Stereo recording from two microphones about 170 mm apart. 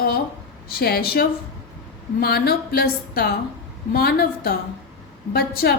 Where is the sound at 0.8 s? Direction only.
65° left (ahead or behind).